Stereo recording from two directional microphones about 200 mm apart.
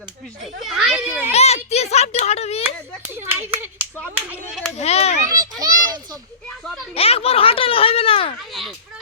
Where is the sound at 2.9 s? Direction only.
10° right (ahead or behind).